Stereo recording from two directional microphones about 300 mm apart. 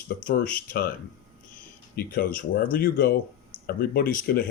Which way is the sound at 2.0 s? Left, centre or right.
Left.